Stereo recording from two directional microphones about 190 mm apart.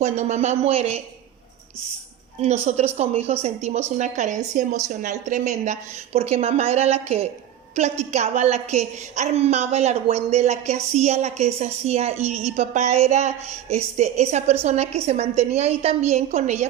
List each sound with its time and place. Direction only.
0.0 s a woman's voice: 35° right (ahead or behind)
2.6 s a woman's voice: 35° right (ahead or behind)